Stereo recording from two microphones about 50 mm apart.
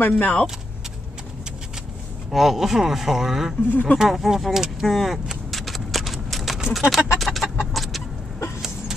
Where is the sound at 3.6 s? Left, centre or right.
Left.